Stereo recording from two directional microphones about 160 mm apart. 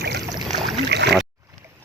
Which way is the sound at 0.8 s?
90° right.